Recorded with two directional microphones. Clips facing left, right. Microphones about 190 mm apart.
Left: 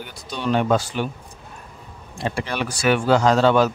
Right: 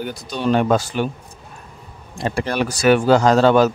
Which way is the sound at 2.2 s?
40° right (ahead or behind).